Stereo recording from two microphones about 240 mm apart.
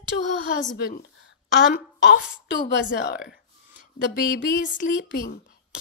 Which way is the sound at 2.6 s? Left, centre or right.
Left.